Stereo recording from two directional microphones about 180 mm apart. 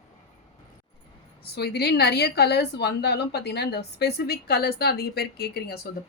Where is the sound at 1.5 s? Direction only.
65° left (ahead or behind).